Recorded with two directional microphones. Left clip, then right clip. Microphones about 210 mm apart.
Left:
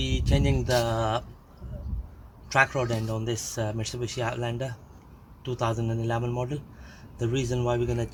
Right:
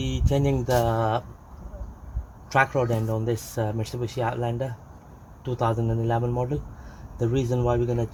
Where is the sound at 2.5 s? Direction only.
35° right (ahead or behind).